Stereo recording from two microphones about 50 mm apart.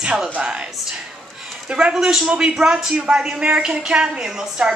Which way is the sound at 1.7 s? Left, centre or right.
Centre.